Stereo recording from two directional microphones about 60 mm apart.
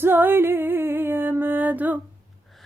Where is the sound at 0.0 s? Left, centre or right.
Right.